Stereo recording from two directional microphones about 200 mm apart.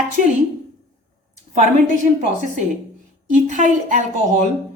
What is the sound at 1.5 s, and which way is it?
Speech, 35° right (ahead or behind).